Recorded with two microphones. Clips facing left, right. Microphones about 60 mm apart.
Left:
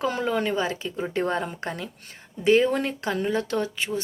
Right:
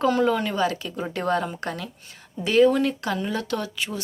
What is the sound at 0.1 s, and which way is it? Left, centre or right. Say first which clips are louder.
Speech: right 3 dB; left.